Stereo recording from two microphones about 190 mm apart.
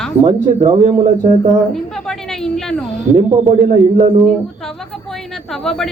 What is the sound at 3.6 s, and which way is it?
Speech, 40° right (ahead or behind).